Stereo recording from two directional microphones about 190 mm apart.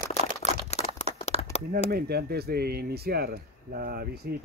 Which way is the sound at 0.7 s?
35° left (ahead or behind).